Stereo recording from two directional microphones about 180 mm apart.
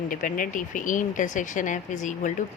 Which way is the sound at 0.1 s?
50° left (ahead or behind).